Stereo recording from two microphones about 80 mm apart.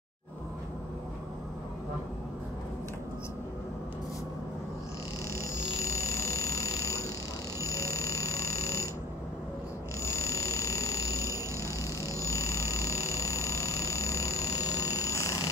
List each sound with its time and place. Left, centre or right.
5.4 s frog: left
10.0 s frog: left